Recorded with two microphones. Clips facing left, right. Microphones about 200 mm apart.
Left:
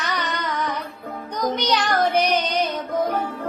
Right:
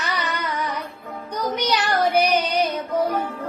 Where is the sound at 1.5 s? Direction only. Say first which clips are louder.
Left 1 dB; 10° right (ahead or behind).